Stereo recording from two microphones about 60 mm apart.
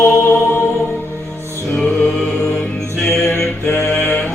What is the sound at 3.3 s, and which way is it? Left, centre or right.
Mantra, left.